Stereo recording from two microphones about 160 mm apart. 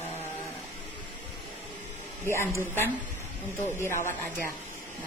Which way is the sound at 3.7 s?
15° left (ahead or behind).